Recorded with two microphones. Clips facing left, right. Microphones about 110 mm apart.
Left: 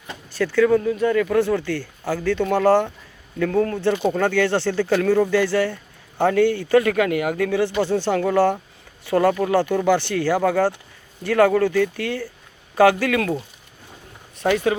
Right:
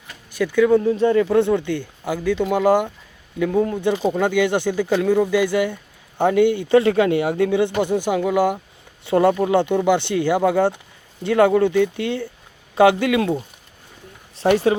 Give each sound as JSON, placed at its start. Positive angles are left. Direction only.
{"t": 0.3, "sound": "speech", "side_deg": -15}
{"t": 9.0, "sound": "speech", "side_deg": -25}
{"t": 14.3, "sound": "speech", "side_deg": -30}